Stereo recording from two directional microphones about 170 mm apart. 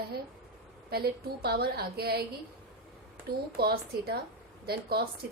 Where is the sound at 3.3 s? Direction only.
65° right (ahead or behind).